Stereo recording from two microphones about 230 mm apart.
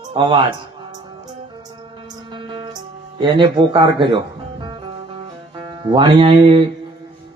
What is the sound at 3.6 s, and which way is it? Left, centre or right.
Speech, right.